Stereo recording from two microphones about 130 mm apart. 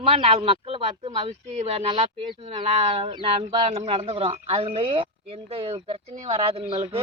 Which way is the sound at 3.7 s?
55° right (ahead or behind).